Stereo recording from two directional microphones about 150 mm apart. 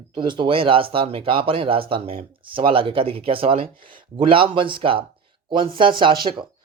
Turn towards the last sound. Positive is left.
turn(degrees=-30)  # may be behind; listen again after turning